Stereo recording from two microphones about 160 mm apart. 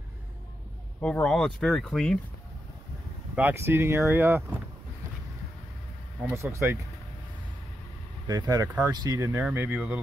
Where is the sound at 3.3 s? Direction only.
15° right (ahead or behind).